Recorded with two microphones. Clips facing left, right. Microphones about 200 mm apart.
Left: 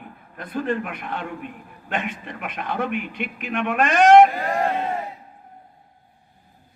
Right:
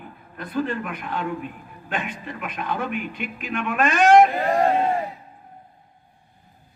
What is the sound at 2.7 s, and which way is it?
A man's voice, 65° left (ahead or behind).